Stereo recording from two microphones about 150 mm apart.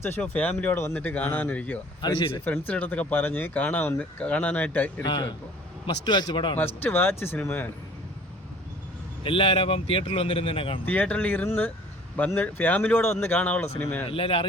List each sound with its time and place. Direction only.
0.0 s speech: 10° left (ahead or behind)
2.0 s speech: 30° left (ahead or behind)
2.4 s speech: 10° left (ahead or behind)
5.0 s speech: 35° left (ahead or behind)
6.8 s speech: 15° left (ahead or behind)
9.2 s speech: 35° left (ahead or behind)
10.8 s speech: 10° left (ahead or behind)
14.1 s speech: 35° left (ahead or behind)